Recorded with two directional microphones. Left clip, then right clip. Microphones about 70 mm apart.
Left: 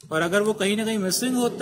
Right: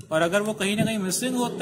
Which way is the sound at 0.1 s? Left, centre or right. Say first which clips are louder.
Left 1 dB; right.